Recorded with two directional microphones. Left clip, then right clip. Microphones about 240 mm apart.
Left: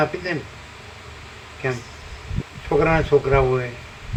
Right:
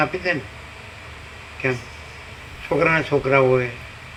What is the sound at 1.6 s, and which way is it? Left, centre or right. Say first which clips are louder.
A man's voice: right 2 dB; right.